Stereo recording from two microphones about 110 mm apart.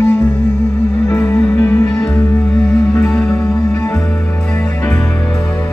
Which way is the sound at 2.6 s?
5° left (ahead or behind).